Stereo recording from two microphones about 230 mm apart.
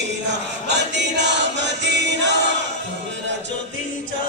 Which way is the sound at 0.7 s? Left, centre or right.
Right.